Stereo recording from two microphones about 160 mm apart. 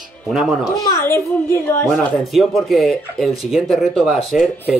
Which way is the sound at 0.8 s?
15° left (ahead or behind).